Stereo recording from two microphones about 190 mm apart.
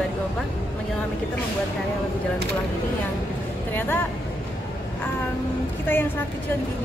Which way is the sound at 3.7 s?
10° left (ahead or behind).